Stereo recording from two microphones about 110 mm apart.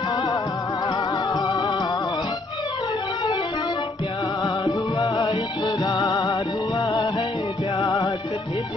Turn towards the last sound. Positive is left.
turn(degrees=45)  # may be behind; listen again after turning